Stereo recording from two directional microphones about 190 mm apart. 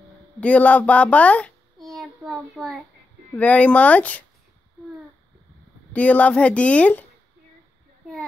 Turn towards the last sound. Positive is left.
turn(degrees=10)  # may be behind; listen again after turning